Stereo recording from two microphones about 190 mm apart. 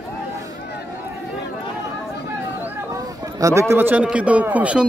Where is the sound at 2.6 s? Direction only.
15° right (ahead or behind).